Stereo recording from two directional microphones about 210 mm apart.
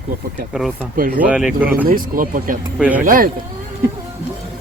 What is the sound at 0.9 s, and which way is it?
Speech, 40° right (ahead or behind).